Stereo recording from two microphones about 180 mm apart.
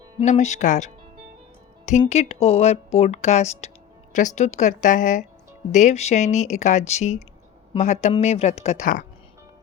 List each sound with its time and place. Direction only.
0.2 s speech: 40° left (ahead or behind)